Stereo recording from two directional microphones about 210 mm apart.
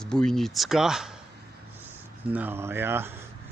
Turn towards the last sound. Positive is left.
turn(degrees=-10)  # may be behind; listen again after turning